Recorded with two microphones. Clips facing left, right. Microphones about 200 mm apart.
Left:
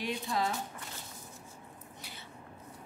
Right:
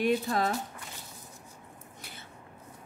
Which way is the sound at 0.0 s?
55° right (ahead or behind).